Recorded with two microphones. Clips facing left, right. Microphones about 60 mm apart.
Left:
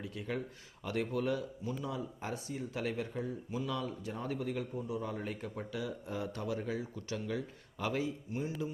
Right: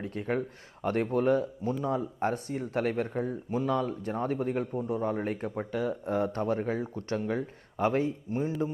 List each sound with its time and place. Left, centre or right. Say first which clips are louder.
0.0 s speech: right 8 dB; right